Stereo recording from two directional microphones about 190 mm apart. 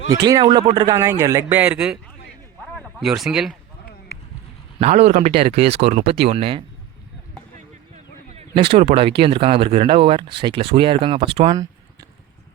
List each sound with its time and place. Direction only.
0.1 s speech: 20° right (ahead or behind); by 3.5 s centre (ahead or behind)
4.8 s speech: 35° right (ahead or behind)
7.9 s a sound: 30° right (ahead or behind)
8.8 s speech: 30° right (ahead or behind)